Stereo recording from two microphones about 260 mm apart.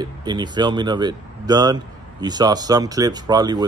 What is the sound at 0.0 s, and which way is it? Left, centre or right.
Speech, centre.